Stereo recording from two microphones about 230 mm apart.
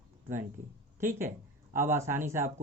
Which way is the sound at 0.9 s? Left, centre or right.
Centre.